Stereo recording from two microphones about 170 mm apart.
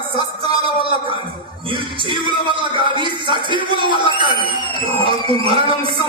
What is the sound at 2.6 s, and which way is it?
Speech, 30° right (ahead or behind).